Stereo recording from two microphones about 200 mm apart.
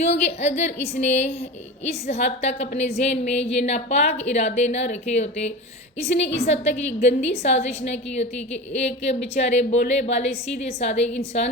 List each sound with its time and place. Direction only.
0.0 s a woman's voice: 35° left (ahead or behind)